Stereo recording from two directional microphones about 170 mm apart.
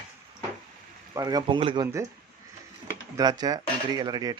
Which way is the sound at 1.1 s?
25° right (ahead or behind).